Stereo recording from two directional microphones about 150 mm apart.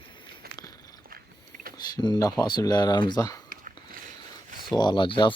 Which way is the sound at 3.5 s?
65° right (ahead or behind).